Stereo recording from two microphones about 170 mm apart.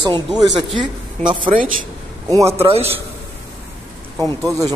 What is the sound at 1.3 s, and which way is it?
Speech, 30° right (ahead or behind).